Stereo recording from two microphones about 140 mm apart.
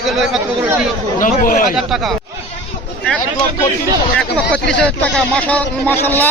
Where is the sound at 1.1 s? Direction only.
75° left (ahead or behind).